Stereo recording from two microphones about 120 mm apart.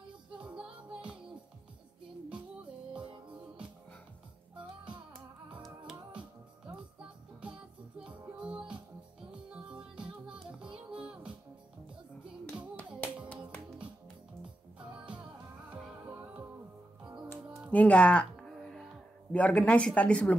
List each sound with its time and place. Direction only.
0.3 s music: 10° right (ahead or behind)
2.2 s music: 10° right (ahead or behind)
5.6 s music: centre (ahead or behind)
8.0 s music: 10° right (ahead or behind)
15.7 s music: 15° right (ahead or behind)
17.6 s music: 10° left (ahead or behind)
19.3 s speech: 10° left (ahead or behind)